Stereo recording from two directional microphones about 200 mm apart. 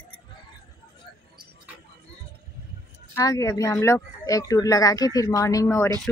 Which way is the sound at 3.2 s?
15° left (ahead or behind).